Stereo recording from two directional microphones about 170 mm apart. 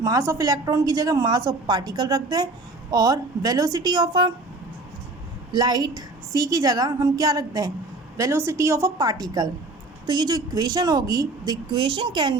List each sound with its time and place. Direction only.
0.0 s a woman's voice: 20° right (ahead or behind)
5.5 s a woman's voice: 25° right (ahead or behind)